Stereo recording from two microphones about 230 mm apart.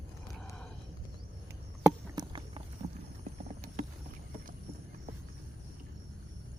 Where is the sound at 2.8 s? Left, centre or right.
Right.